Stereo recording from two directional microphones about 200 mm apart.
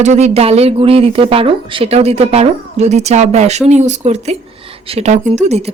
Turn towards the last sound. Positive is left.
turn(degrees=-35)  # may be behind; listen again after turning